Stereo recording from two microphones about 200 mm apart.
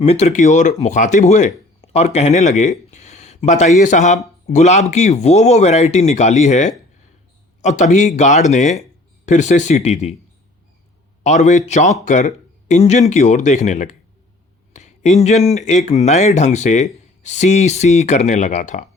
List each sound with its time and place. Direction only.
0.0 s speech: 30° left (ahead or behind)
11.2 s speech: 35° left (ahead or behind)
14.7 s a sound: 35° left (ahead or behind)
15.5 s speech: 35° left (ahead or behind)